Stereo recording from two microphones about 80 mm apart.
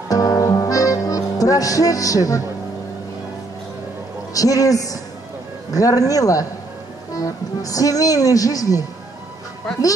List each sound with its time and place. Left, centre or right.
0.1 s music: left
4.3 s a woman's voice: left